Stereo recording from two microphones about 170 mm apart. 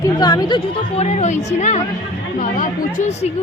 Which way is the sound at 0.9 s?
40° left (ahead or behind).